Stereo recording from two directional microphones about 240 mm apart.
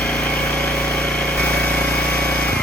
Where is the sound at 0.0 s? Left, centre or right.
Centre.